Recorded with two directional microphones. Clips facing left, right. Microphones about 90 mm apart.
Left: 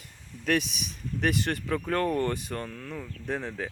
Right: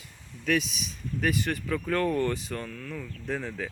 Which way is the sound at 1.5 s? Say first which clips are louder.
Even; 25° left (ahead or behind).